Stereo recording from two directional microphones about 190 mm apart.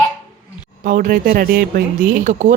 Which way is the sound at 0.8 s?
45° right (ahead or behind).